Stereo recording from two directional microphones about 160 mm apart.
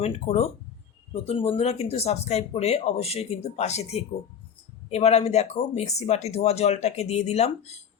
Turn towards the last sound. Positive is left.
turn(degrees=40)  # may be behind; listen again after turning